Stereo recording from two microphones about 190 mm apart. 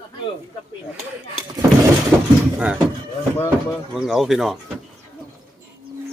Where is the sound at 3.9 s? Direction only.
Centre (ahead or behind).